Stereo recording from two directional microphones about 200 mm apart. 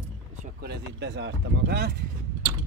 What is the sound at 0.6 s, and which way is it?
Speech, 55° right (ahead or behind).